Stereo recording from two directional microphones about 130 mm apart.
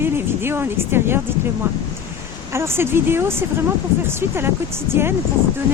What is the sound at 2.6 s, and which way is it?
Speech, 20° right (ahead or behind).